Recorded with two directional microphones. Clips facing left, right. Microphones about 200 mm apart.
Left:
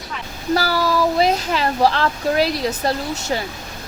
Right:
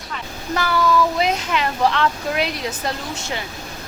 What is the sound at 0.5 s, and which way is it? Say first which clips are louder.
Speech: even; 35° left (ahead or behind).